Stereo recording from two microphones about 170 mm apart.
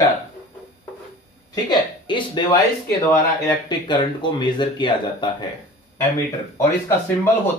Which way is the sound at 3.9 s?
25° left (ahead or behind).